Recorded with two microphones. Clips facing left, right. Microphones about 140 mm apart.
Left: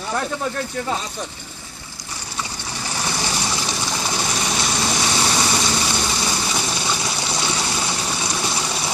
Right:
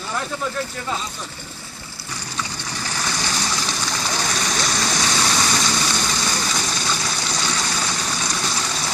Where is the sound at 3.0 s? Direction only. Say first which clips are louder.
Left 2 dB; 25° left (ahead or behind).